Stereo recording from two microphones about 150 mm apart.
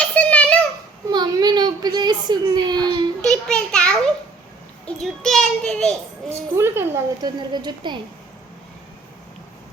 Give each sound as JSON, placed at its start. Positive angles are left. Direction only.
{"t": 0.0, "sound": "a sound", "side_deg": 10}
{"t": 1.1, "sound": "baby cry", "side_deg": -30}
{"t": 3.2, "sound": "a sound", "side_deg": 5}
{"t": 4.9, "sound": "a child's voice", "side_deg": 5}
{"t": 6.6, "sound": "a woman's voice", "side_deg": -15}
{"t": 7.3, "sound": "a woman's voice", "side_deg": -30}